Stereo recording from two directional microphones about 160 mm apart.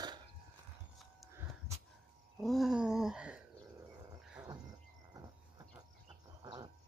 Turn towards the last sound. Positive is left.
turn(degrees=-25)  # may be behind; listen again after turning